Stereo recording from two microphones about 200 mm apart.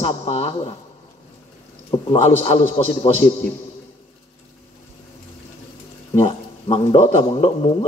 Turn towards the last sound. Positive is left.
turn(degrees=25)  # may be behind; listen again after turning